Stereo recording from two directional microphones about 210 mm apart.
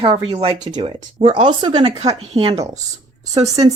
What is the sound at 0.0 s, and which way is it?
A woman's voice, 25° right (ahead or behind).